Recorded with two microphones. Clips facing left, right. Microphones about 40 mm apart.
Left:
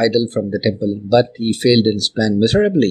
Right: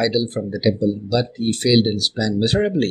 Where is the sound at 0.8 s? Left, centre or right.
Left.